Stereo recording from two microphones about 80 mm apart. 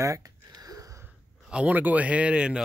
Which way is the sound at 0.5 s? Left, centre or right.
Right.